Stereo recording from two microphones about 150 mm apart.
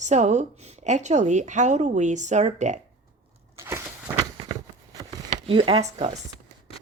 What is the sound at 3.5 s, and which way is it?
Walk, 15° right (ahead or behind).